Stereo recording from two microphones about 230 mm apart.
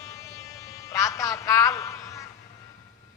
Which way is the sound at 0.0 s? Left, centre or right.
Centre.